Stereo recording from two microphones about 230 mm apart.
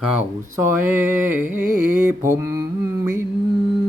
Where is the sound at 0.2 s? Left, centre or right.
Centre.